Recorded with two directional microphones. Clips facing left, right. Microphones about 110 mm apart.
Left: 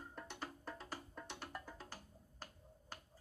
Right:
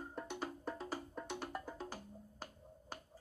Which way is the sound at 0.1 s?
15° right (ahead or behind).